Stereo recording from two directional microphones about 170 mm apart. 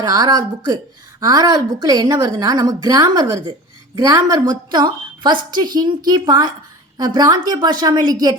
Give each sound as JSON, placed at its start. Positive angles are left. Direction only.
{"t": 0.0, "sound": "a woman's voice", "side_deg": -20}